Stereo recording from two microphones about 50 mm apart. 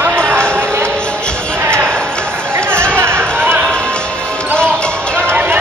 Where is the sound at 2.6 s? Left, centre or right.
Right.